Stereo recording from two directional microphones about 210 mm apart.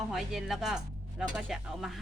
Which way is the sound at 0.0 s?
Centre (ahead or behind).